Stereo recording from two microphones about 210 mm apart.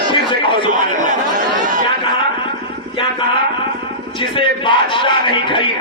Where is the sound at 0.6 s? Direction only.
35° right (ahead or behind).